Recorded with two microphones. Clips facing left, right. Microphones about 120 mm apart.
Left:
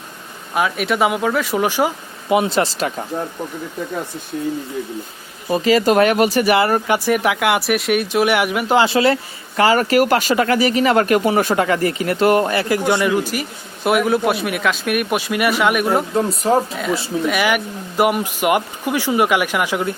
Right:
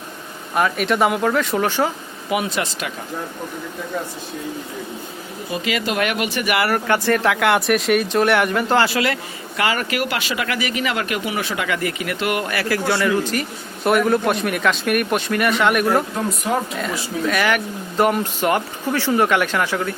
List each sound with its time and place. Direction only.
0.5 s a man's voice: centre (ahead or behind)
2.3 s speech: 30° left (ahead or behind)
5.5 s speech: 35° left (ahead or behind); by 8.9 s 10° left (ahead or behind)
8.9 s a man's voice: 30° left (ahead or behind); by 16.0 s 5° left (ahead or behind)
16.1 s speech: 30° left (ahead or behind)
17.2 s speech: 10° left (ahead or behind)